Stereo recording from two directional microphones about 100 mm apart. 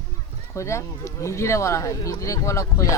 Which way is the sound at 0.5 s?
30° left (ahead or behind).